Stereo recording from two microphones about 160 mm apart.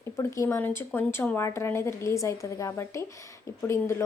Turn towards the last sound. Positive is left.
turn(degrees=15)  # may be behind; listen again after turning